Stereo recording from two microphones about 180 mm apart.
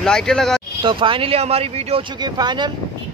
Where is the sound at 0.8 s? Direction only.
30° right (ahead or behind).